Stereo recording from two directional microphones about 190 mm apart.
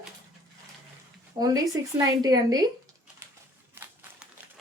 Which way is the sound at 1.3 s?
20° right (ahead or behind).